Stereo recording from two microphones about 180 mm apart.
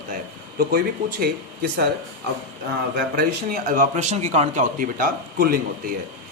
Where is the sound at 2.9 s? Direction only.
55° right (ahead or behind).